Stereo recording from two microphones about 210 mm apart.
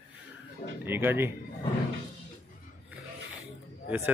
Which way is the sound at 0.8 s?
10° right (ahead or behind).